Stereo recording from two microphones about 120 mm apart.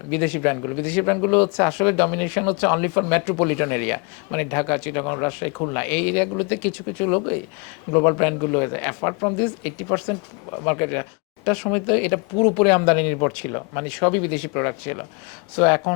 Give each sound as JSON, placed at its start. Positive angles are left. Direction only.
{"t": 0.1, "sound": "speech", "side_deg": 10}